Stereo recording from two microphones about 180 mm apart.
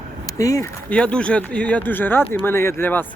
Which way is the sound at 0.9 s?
5° left (ahead or behind).